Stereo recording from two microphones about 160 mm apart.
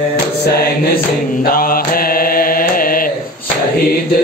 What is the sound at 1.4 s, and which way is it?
Mantra, 65° left (ahead or behind).